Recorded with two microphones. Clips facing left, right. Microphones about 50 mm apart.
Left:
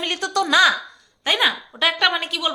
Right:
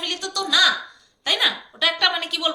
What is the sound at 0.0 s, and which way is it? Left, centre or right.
Speech, left.